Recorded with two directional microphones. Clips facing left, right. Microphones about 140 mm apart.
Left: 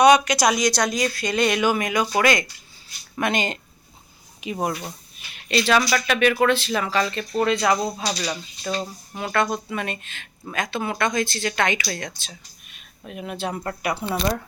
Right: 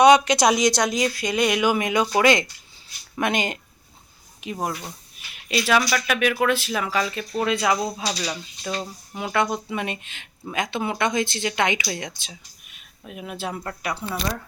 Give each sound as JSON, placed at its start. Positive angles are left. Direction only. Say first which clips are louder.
{"t": 0.0, "sound": "speech", "louder": "right 1 dB", "side_deg": -25}
{"t": 4.4, "sound": "speech", "louder": "left 2 dB", "side_deg": 0}
{"t": 5.3, "sound": "speech", "louder": "left 1 dB", "side_deg": -5}
{"t": 9.1, "sound": "speech", "louder": "even", "side_deg": -10}
{"t": 14.0, "sound": "speech", "louder": "left 5 dB", "side_deg": 25}